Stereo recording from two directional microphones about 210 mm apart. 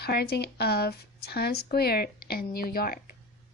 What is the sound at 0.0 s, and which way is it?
A woman's voice, 50° left (ahead or behind).